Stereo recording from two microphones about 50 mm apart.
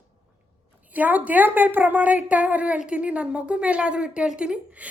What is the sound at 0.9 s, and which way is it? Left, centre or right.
A woman's voice, right.